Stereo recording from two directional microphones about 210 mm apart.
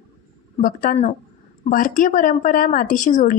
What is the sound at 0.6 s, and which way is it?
Speech, 40° left (ahead or behind).